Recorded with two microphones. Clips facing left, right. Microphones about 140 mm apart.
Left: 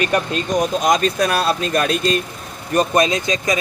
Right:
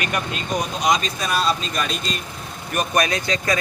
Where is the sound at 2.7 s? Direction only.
30° left (ahead or behind).